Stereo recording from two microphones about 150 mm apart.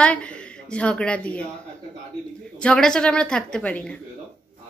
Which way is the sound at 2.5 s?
5° left (ahead or behind).